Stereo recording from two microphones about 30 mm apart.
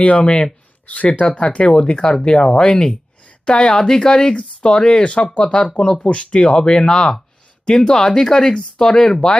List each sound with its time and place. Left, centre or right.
0.0 s speech: left
0.9 s speech: left
1.4 s speech: left
1.7 s speech: left
3.8 s speech: centre
4.1 s speech: left
5.0 s speech: left
5.8 s speech: left
6.1 s speech: left
6.4 s speech: left